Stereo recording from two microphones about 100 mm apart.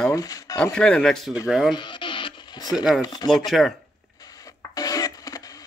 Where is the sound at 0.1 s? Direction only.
40° left (ahead or behind).